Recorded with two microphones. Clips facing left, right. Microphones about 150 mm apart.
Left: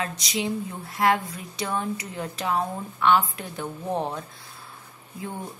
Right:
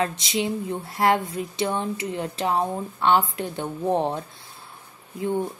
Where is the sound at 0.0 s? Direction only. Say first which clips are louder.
Right 4 dB; 25° right (ahead or behind).